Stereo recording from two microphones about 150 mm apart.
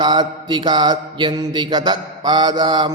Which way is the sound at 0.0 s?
30° right (ahead or behind).